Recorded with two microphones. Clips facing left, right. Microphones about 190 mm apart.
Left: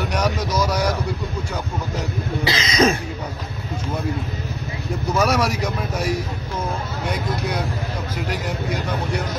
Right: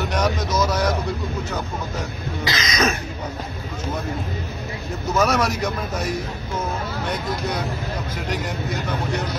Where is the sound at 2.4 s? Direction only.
30° left (ahead or behind).